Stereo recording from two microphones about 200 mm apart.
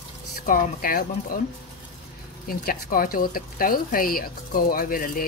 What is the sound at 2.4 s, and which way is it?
Speech, 45° left (ahead or behind).